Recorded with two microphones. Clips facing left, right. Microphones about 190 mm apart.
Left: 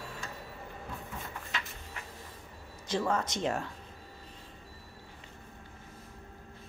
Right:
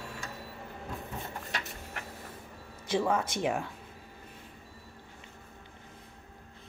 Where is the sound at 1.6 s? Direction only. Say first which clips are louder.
Right 3 dB; 65° right (ahead or behind).